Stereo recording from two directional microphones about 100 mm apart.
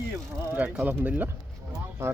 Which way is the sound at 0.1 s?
15° right (ahead or behind).